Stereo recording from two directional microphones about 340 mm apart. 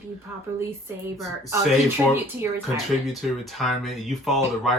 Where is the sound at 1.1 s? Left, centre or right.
Centre.